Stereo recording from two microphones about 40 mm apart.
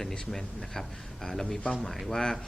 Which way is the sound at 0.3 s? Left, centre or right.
Centre.